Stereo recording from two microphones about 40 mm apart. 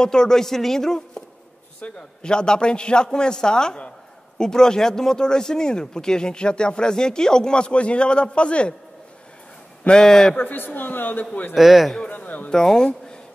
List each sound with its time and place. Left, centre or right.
0.0 s speech: centre
9.8 s speech: centre
10.3 s a woman's voice: left
11.5 s a man's voice: centre
12.1 s a sound: left
12.4 s speech: centre